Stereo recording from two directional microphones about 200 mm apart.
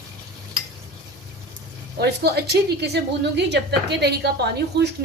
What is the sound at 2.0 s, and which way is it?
A woman's voice, 55° right (ahead or behind).